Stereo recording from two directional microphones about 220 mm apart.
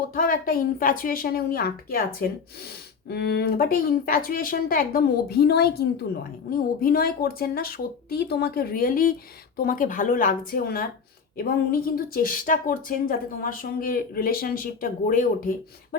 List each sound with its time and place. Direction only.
0.1 s a woman's voice: 40° left (ahead or behind)